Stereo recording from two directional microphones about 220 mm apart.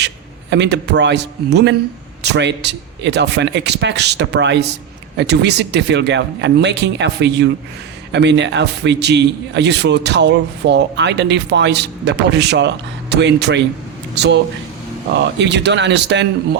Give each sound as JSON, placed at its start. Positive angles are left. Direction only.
{"t": 0.5, "sound": "a man's voice", "side_deg": -50}